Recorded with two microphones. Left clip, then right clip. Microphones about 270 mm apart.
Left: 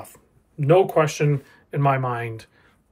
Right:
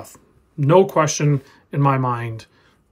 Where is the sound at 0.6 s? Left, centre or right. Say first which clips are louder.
Right 2 dB; right.